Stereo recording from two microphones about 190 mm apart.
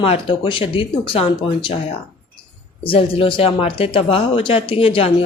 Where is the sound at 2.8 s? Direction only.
30° left (ahead or behind).